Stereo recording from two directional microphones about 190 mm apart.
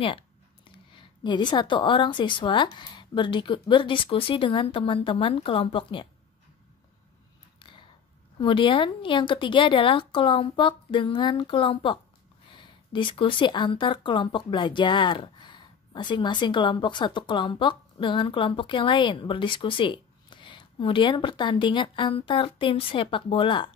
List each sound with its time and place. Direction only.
0.7 s speech: 25° left (ahead or behind)
7.5 s a sound: 25° left (ahead or behind)
8.4 s speech: 25° left (ahead or behind)